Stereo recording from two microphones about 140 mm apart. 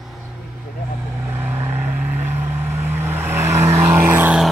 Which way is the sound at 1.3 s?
15° right (ahead or behind).